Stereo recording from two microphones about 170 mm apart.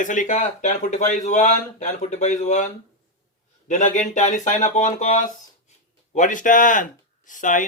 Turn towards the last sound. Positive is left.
turn(degrees=50)  # may be behind; listen again after turning